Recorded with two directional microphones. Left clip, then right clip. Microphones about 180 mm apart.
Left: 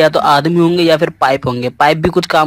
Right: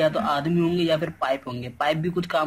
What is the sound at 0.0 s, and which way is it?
Speech, 45° left (ahead or behind).